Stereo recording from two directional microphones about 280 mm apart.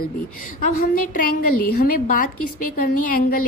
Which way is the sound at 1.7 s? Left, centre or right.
Left.